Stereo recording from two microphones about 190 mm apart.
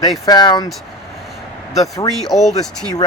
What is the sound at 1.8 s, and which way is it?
Speech, 20° left (ahead or behind).